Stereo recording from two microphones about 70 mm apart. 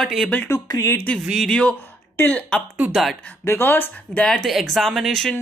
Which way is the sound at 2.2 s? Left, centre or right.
Left.